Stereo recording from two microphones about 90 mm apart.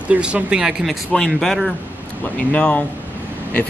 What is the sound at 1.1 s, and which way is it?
Speech, 5° left (ahead or behind).